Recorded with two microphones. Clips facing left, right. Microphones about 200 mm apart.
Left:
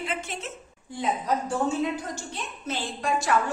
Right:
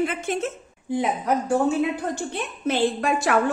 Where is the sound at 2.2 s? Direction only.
60° right (ahead or behind).